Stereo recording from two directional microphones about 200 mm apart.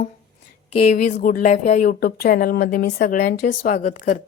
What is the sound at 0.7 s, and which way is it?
Speech, 35° left (ahead or behind).